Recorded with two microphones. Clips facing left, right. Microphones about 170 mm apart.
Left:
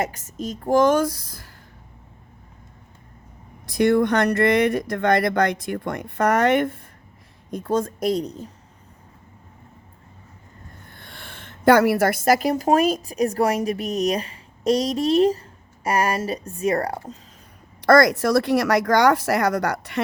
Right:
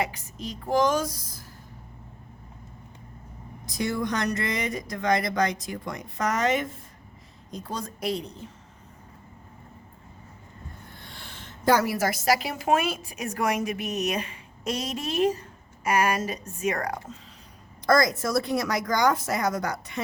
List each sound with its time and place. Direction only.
0.0 s a woman's voice: 45° left (ahead or behind); by 1.5 s 65° left (ahead or behind)
3.7 s speech: 65° left (ahead or behind)
7.5 s a woman's voice: 50° left (ahead or behind)
11.0 s a woman's voice: 55° left (ahead or behind); by 17.2 s 35° left (ahead or behind)
17.8 s speech: 65° left (ahead or behind)